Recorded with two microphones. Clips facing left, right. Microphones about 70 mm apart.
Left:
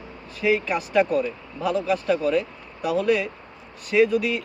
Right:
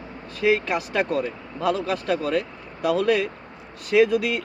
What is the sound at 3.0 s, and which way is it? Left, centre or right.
Speech, right.